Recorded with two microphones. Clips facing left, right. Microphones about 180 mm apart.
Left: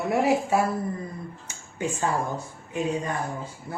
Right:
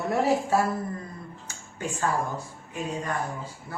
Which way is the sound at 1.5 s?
20° left (ahead or behind).